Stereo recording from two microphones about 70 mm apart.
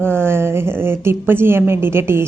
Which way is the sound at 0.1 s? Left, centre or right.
Right.